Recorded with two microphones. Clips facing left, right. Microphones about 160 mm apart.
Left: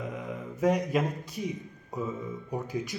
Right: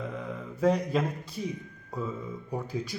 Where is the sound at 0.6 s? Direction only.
15° left (ahead or behind).